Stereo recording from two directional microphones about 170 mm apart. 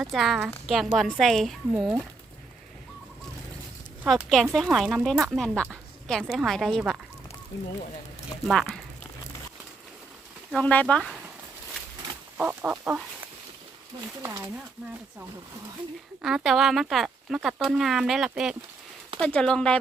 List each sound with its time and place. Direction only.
0.0 s speech: centre (ahead or behind)
4.0 s speech: 5° right (ahead or behind)
7.5 s speech: 20° left (ahead or behind)
8.4 s speech: 5° left (ahead or behind)
10.5 s speech: 10° left (ahead or behind)
12.4 s chicken: 10° right (ahead or behind)
14.2 s speech: 15° right (ahead or behind)
16.2 s speech: centre (ahead or behind)